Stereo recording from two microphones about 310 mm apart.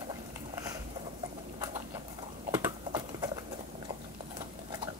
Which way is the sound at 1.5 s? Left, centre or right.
Centre.